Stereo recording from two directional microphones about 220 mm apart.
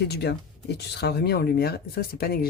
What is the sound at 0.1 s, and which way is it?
Speech, 50° left (ahead or behind).